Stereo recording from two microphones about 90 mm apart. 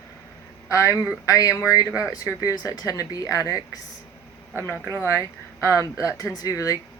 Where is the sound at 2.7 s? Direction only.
40° left (ahead or behind).